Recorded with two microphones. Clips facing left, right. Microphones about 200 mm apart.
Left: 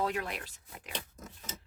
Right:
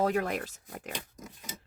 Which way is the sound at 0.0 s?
45° right (ahead or behind).